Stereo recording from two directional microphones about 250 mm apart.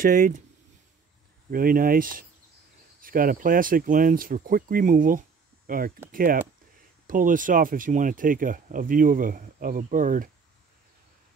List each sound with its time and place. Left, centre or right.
0.0 s speech: right
1.5 s speech: right
7.1 s speech: right